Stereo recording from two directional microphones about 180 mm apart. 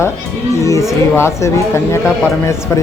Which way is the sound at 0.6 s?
15° left (ahead or behind).